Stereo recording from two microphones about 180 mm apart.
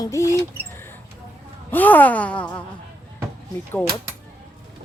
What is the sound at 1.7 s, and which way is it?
Speech, 10° left (ahead or behind).